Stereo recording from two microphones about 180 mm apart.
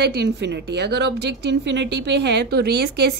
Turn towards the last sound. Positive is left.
turn(degrees=-65)  # may be behind; listen again after turning